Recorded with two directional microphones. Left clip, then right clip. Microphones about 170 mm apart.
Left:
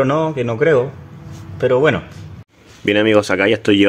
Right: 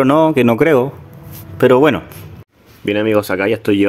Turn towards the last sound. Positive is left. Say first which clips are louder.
# left 1 dB
turn(degrees=0)  # may be behind; listen again after turning